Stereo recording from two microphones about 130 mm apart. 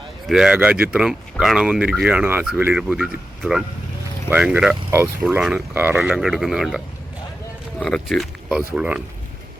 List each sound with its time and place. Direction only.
0.3 s speech: 5° right (ahead or behind)
5.7 s speech: 15° right (ahead or behind)
6.0 s speech: centre (ahead or behind)